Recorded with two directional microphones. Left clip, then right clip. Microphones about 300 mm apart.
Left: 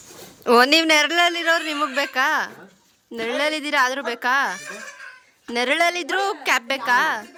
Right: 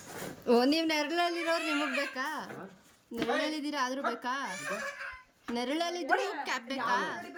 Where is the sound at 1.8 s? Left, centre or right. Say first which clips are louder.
Left 10 dB; centre.